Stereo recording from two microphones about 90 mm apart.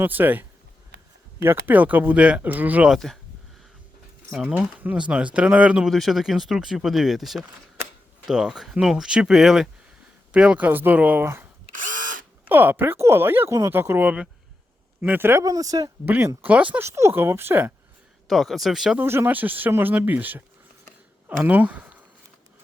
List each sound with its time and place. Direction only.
0.0 s speech: 20° right (ahead or behind)
2.9 s speech: 5° left (ahead or behind)
4.7 s speech: 15° right (ahead or behind)
5.9 s speech: centre (ahead or behind); by 11.4 s 25° right (ahead or behind)
12.5 s speech: 20° right (ahead or behind)
15.4 s speech: 40° right (ahead or behind)
16.0 s speech: 25° right (ahead or behind)
16.8 s speech: 30° right (ahead or behind)
18.3 s speech: centre (ahead or behind)
18.9 s speech: 25° right (ahead or behind)
21.4 s speech: 15° right (ahead or behind)